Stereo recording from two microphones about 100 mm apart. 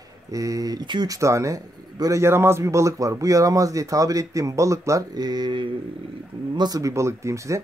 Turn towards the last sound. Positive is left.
turn(degrees=-30)  # may be behind; listen again after turning